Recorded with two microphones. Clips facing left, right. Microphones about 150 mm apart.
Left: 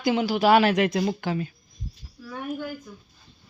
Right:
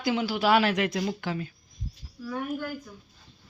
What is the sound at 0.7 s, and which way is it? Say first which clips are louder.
Speech: left 5 dB; 20° left (ahead or behind).